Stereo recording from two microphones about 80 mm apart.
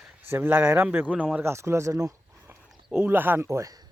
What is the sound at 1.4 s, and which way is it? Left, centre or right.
Speech, right.